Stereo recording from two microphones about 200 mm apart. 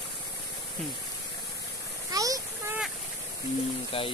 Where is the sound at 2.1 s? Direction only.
15° right (ahead or behind).